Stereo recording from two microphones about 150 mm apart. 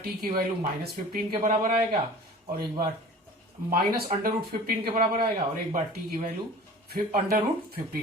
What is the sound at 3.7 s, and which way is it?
Speech, 75° right (ahead or behind).